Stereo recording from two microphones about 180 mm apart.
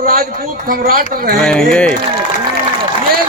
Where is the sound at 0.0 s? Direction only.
50° right (ahead or behind).